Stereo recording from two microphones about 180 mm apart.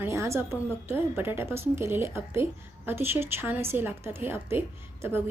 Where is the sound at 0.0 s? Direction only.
15° right (ahead or behind).